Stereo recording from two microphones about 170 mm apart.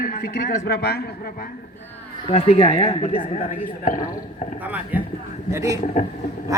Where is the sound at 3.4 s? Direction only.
55° left (ahead or behind).